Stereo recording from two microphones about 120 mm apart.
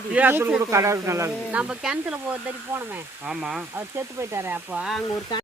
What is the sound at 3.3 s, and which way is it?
Speech, 5° right (ahead or behind).